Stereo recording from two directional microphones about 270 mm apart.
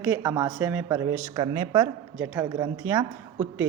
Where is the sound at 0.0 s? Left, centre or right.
Centre.